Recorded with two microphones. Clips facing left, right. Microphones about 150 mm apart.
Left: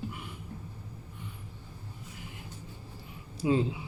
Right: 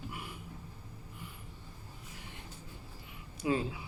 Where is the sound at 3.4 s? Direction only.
25° left (ahead or behind).